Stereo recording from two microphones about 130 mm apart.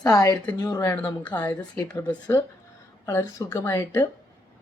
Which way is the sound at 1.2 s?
10° left (ahead or behind).